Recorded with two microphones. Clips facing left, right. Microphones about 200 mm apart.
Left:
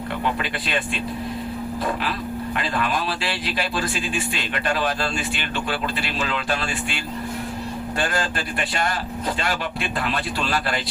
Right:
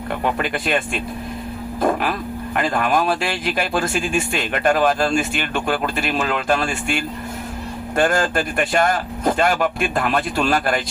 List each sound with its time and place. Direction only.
1.8 s speech: 50° right (ahead or behind)